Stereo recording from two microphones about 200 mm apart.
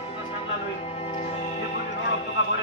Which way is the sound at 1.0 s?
30° left (ahead or behind).